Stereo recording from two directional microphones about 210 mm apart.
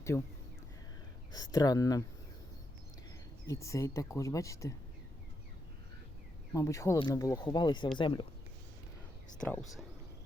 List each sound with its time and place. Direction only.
0.1 s speech: 10° left (ahead or behind)
1.3 s speech: 20° left (ahead or behind)
3.4 s speech: 15° left (ahead or behind)
6.5 s speech: 15° left (ahead or behind)
9.4 s speech: 5° left (ahead or behind)